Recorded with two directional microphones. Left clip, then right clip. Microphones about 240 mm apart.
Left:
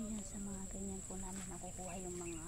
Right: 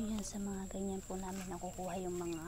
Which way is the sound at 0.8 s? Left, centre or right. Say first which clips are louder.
Right 9 dB; right.